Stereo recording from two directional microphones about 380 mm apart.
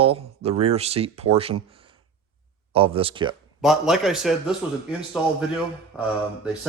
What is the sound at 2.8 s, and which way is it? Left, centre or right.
Speech, centre.